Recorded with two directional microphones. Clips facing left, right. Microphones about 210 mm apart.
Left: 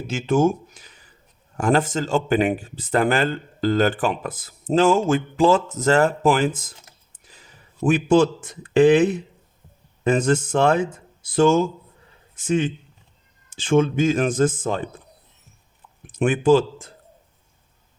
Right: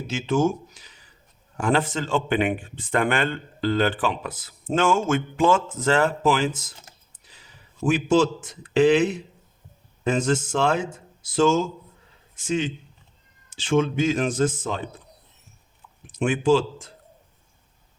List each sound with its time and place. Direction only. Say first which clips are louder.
0.1 s speech: left 3 dB; 50° left (ahead or behind)
7.9 s speech: left 3 dB; 55° left (ahead or behind)
16.0 s speech: left 3 dB; 55° left (ahead or behind)